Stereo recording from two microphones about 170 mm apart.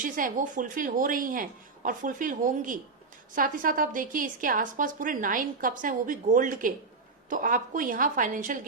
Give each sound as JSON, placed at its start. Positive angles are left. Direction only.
{"t": 0.0, "sound": "a woman's voice", "side_deg": -50}